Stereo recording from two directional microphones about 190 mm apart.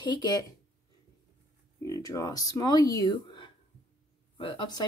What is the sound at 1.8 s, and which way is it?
Speech, 20° left (ahead or behind).